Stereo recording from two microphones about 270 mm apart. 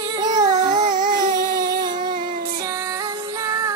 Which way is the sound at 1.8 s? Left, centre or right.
Centre.